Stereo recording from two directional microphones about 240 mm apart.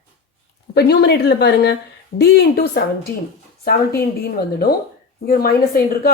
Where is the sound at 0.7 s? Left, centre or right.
Left.